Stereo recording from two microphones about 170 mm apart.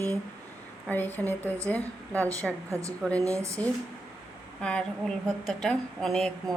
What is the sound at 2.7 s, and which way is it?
Speech, 20° right (ahead or behind).